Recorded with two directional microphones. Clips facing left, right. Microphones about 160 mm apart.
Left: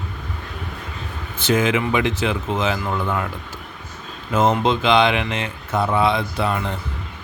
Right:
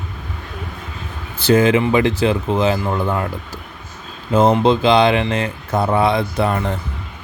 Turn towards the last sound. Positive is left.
turn(degrees=-45)  # may be behind; listen again after turning